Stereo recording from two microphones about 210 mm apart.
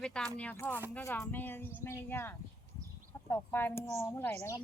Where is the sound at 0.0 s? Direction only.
5° left (ahead or behind).